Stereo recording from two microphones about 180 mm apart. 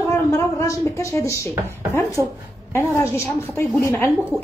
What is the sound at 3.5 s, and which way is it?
Speech, 10° left (ahead or behind).